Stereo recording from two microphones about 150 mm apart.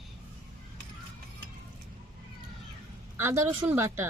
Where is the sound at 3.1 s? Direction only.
15° right (ahead or behind).